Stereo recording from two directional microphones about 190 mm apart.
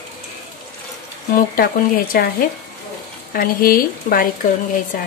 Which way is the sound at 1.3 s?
50° left (ahead or behind).